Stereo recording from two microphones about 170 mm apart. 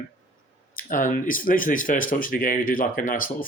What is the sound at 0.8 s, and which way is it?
Speech, 50° left (ahead or behind).